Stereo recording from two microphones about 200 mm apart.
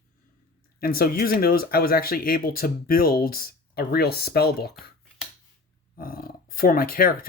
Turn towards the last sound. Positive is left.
turn(degrees=45)  # may be behind; listen again after turning